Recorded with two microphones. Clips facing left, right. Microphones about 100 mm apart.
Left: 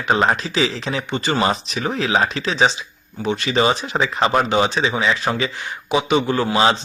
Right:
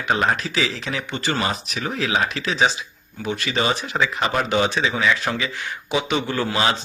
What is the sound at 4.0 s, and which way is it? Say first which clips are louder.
Speech: left 4 dB; 35° left (ahead or behind).